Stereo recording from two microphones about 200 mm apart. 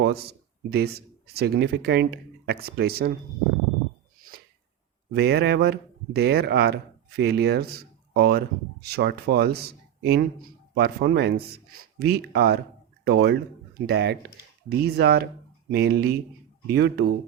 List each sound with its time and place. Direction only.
0.0 s speech: 55° right (ahead or behind)
5.1 s speech: 55° right (ahead or behind)